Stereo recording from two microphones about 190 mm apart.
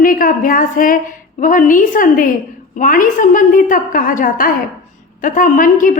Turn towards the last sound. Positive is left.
turn(degrees=45)  # may be behind; listen again after turning